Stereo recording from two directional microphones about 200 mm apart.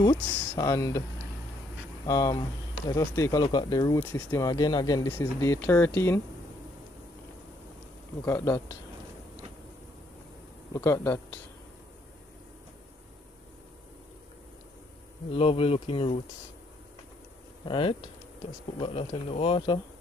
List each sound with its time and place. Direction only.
0.0 s speech: 20° left (ahead or behind)
2.0 s speech: 20° left (ahead or behind)
8.3 s speech: 15° left (ahead or behind)
10.7 s speech: 10° left (ahead or behind)
15.3 s speech: 30° left (ahead or behind)
17.6 s speech: 25° left (ahead or behind)